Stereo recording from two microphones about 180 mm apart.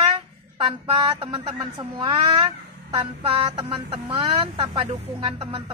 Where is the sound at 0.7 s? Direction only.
30° right (ahead or behind).